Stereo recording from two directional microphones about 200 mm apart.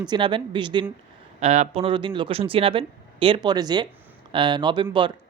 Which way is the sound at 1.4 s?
35° right (ahead or behind).